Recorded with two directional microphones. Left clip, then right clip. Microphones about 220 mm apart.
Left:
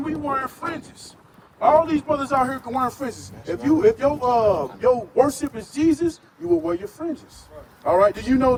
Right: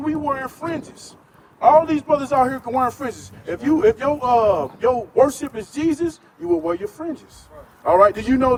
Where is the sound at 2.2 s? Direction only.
45° right (ahead or behind).